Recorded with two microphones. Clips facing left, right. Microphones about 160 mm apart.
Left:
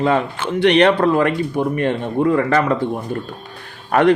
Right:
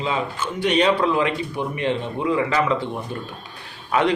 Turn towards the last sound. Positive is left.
turn(degrees=55)  # may be behind; listen again after turning